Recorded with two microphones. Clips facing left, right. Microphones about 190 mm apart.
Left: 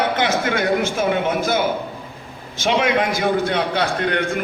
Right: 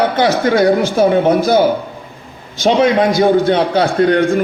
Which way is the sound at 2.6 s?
35° right (ahead or behind).